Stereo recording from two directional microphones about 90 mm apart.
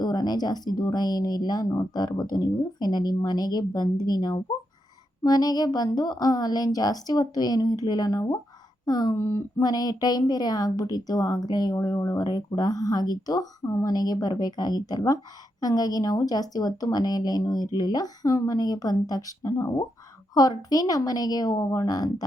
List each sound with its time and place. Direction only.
0.0 s speech: 50° left (ahead or behind)
9.1 s speech: 30° left (ahead or behind)
9.6 s speech: 45° left (ahead or behind)
19.5 s speech: 35° left (ahead or behind)
20.3 s speech: 45° left (ahead or behind)